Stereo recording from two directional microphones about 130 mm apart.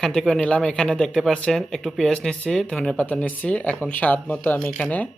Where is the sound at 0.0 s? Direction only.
5° left (ahead or behind).